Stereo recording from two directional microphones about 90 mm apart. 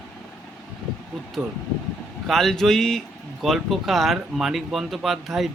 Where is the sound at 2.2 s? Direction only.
Centre (ahead or behind).